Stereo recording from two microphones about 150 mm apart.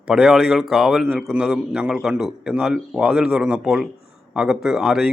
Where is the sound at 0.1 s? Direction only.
Centre (ahead or behind).